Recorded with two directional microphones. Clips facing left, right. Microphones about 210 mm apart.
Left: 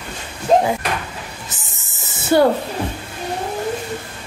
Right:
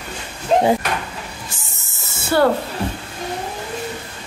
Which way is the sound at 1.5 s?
20° left (ahead or behind).